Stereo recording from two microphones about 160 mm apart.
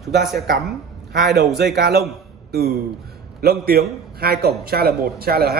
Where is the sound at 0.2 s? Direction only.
Centre (ahead or behind).